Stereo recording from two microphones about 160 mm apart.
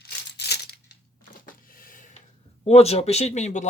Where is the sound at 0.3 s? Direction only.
90° left.